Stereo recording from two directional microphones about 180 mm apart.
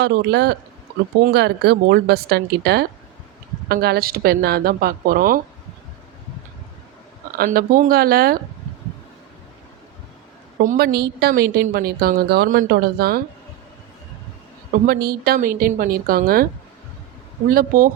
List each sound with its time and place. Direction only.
0.0 s a woman's voice: 65° right (ahead or behind)
7.3 s a woman's voice: 55° right (ahead or behind)
10.6 s a woman's voice: 50° right (ahead or behind)
14.8 s a woman's voice: 60° right (ahead or behind)
17.5 s a woman's voice: 50° right (ahead or behind)